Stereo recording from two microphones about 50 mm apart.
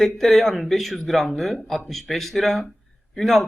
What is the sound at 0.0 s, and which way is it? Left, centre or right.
Speech, centre.